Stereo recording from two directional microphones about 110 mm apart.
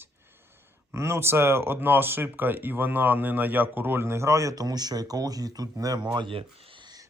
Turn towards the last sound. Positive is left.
turn(degrees=-45)  # may be behind; listen again after turning